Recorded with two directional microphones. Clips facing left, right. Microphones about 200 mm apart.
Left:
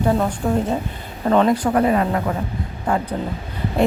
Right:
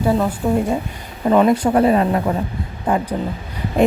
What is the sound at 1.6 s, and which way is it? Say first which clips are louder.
Speech: right 3 dB; 30° right (ahead or behind).